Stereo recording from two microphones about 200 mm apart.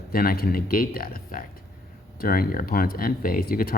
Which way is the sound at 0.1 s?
45° left (ahead or behind).